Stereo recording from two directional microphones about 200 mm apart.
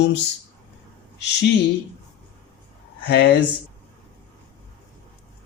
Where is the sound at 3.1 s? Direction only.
55° left (ahead or behind).